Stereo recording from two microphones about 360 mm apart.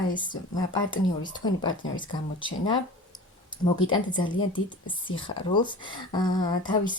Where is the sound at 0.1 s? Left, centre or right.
Left.